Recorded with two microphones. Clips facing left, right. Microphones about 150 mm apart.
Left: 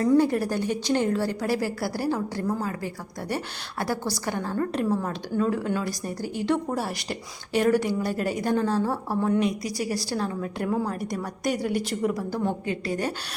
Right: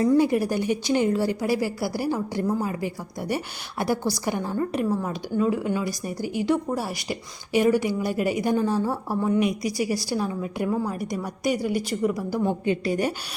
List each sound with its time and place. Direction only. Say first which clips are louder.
0.2 s a woman's voice: right 1 dB; 10° right (ahead or behind)
12.6 s a woman's voice: right 4 dB; 20° right (ahead or behind)